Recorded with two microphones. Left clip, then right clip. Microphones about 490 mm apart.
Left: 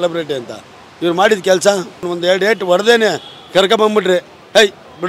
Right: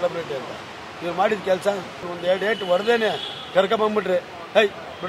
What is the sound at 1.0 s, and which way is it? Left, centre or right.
A man's voice, left.